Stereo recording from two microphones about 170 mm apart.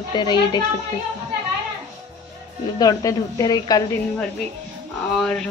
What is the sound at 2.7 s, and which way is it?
Speech, 20° left (ahead or behind).